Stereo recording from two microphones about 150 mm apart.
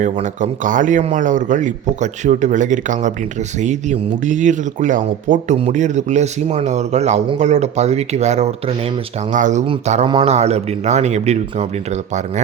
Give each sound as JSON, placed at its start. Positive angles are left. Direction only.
{"t": 0.0, "sound": "speech", "side_deg": -55}